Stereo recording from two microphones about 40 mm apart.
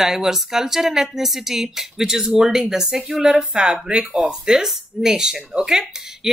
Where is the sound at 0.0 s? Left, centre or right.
Centre.